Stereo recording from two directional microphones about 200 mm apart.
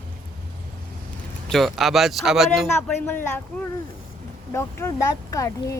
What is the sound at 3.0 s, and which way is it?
Speech, 10° left (ahead or behind).